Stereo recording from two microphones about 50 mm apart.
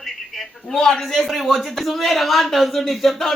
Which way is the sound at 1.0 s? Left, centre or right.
Centre.